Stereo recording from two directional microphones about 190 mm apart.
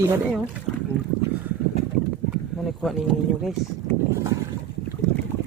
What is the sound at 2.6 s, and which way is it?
Speech, centre (ahead or behind).